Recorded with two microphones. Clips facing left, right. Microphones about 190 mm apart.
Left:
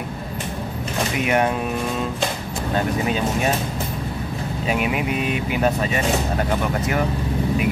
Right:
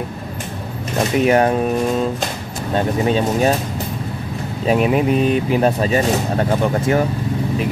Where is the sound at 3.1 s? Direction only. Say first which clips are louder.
Right 5 dB; 35° right (ahead or behind).